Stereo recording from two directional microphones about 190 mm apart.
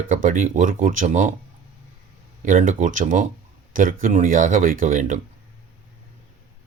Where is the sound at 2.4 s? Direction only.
45° right (ahead or behind).